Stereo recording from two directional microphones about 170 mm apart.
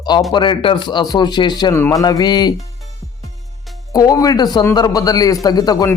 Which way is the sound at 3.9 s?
20° left (ahead or behind).